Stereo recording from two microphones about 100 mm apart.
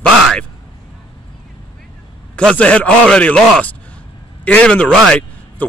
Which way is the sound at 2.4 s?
10° left (ahead or behind).